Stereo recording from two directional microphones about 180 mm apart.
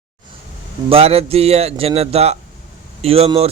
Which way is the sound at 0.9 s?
35° right (ahead or behind).